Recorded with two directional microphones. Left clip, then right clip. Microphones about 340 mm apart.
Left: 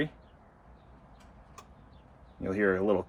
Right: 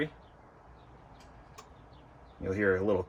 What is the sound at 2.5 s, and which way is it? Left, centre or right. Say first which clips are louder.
Speech: left 1 dB; centre.